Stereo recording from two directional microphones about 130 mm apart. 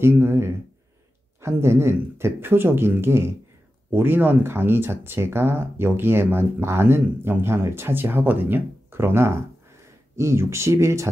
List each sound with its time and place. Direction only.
0.0 s speech: 20° right (ahead or behind)